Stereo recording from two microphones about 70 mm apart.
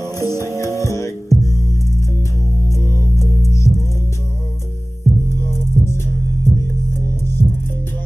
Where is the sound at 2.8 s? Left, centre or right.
Right.